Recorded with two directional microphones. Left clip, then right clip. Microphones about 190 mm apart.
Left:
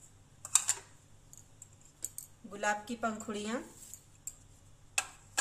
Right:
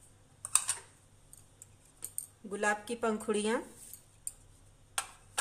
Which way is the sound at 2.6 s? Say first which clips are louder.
Right 2 dB; 55° right (ahead or behind).